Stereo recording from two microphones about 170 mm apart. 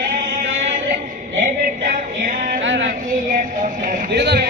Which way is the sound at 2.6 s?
90° right.